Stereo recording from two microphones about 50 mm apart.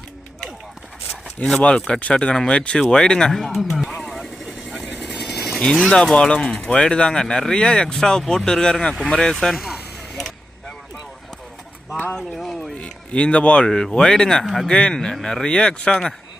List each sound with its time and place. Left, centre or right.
1.5 s speech: centre
3.3 s speech: centre
3.9 s vehicle: centre
5.9 s speech: centre
9.3 s speech: centre
12.3 s a sound: centre
12.7 s a sound: left
13.7 s speech: centre
14.4 s speech: centre
14.7 s speech: centre